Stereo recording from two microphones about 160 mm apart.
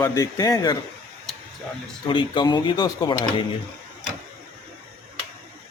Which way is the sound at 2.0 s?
30° left (ahead or behind).